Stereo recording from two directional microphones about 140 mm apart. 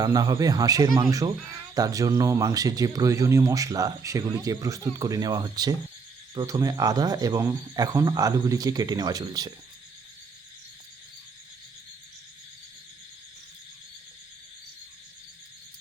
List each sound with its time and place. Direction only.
0.0 s speech: 25° right (ahead or behind)